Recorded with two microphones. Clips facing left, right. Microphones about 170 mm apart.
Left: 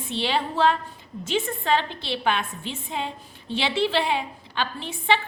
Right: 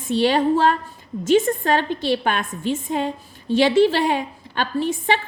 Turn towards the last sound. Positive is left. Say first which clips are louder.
# right 4 dB
turn(degrees=-45)  # may be behind; listen again after turning